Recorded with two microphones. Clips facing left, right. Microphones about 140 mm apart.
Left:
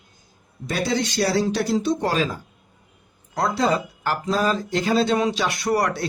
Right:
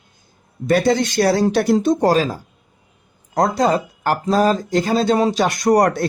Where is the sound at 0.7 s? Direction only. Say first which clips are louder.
Right 8 dB; 50° right (ahead or behind).